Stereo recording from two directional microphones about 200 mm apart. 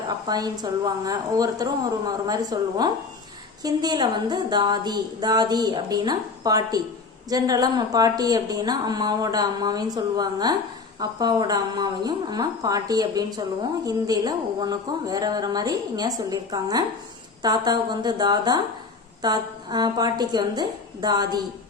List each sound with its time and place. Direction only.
0.3 s a woman's voice: 20° right (ahead or behind)